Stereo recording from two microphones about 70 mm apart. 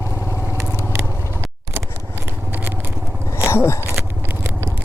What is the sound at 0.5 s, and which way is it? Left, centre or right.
Vehicle, right.